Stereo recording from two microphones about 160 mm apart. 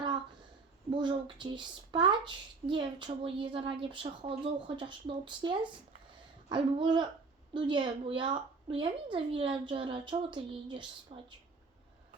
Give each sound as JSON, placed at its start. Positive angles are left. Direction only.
{"t": 0.9, "sound": "a woman's voice", "side_deg": -30}